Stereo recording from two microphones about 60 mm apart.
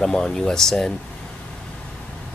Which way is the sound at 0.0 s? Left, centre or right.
Centre.